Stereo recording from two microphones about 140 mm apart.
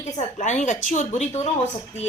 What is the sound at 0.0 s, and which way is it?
A woman's voice, 55° left (ahead or behind).